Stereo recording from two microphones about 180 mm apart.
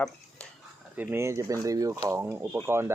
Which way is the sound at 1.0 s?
15° right (ahead or behind).